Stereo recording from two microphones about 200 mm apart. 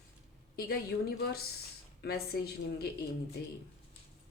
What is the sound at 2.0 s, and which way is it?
Speech, 55° left (ahead or behind).